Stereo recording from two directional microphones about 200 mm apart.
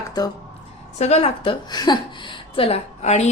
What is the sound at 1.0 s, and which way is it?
A woman's voice, 30° left (ahead or behind).